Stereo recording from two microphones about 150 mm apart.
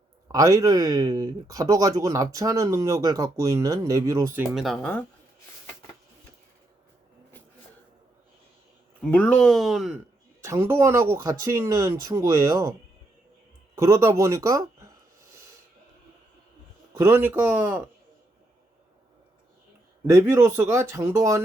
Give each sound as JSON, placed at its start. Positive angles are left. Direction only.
{"t": 0.3, "sound": "speech", "side_deg": -25}
{"t": 4.5, "sound": "speech", "side_deg": 0}
{"t": 9.0, "sound": "speech", "side_deg": 10}
{"t": 10.4, "sound": "speech", "side_deg": -20}
{"t": 13.7, "sound": "speech", "side_deg": -20}
{"t": 16.9, "sound": "speech", "side_deg": -15}
{"t": 20.3, "sound": "speech", "side_deg": -15}